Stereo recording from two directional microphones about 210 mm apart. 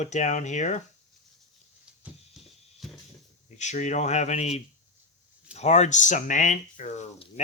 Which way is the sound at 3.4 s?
35° left (ahead or behind).